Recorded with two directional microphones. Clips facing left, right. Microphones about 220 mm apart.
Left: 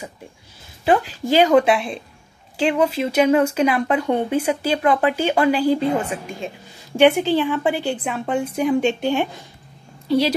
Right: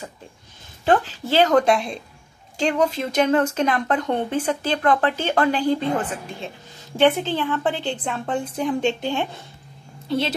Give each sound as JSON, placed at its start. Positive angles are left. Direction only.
{"t": 0.8, "sound": "a woman's voice", "side_deg": 15}